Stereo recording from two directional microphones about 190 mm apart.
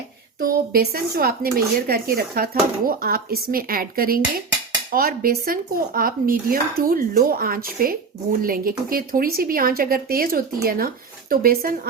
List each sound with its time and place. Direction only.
0.4 s speech: 50° right (ahead or behind)